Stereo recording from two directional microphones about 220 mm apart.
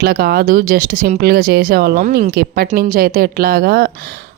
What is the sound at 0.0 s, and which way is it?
Speech, 45° right (ahead or behind).